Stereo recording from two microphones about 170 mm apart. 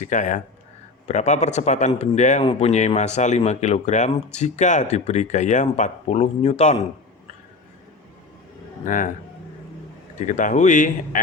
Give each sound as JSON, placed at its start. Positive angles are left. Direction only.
{"t": 0.0, "sound": "speech", "side_deg": 45}
{"t": 2.4, "sound": "speech", "side_deg": 35}
{"t": 8.8, "sound": "speech", "side_deg": 50}
{"t": 10.2, "sound": "speech", "side_deg": 45}